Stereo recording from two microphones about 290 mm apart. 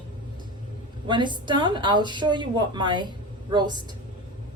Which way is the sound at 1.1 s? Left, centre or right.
Centre.